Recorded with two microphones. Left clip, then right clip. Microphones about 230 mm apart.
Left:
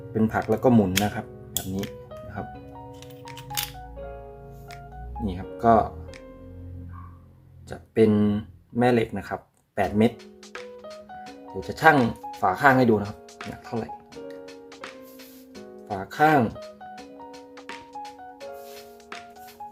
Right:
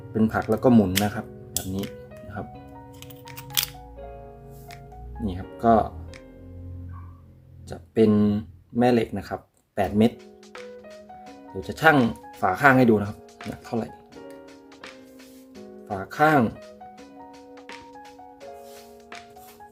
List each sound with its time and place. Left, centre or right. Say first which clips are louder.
0.1 s speech: even; centre
3.9 s music: left 2 dB; centre
5.2 s speech: left 1 dB; centre
7.7 s speech: even; centre
10.5 s music: left 2 dB; centre
11.7 s speech: even; centre
14.4 s music: left 3 dB; centre
16.5 s music: left 2 dB; centre